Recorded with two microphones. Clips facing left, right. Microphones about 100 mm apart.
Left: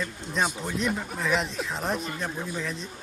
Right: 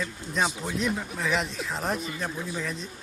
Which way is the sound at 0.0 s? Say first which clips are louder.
Even; centre (ahead or behind).